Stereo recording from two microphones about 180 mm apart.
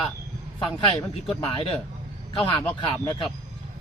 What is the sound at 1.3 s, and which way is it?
Speech, 35° left (ahead or behind).